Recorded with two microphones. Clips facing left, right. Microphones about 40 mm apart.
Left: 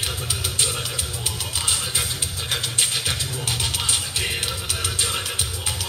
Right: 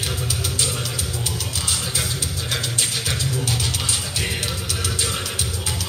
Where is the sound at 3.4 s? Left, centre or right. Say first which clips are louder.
Right 2 dB; left.